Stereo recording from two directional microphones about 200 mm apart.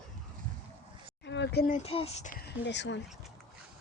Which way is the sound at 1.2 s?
60° left (ahead or behind).